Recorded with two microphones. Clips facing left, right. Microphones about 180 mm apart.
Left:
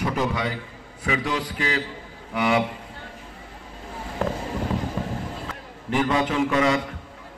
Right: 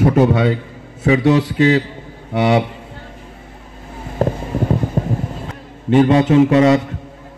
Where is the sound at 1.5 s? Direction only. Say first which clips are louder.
Right 13 dB; 30° right (ahead or behind).